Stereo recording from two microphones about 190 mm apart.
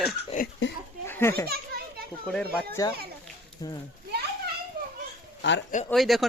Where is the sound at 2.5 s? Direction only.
15° left (ahead or behind).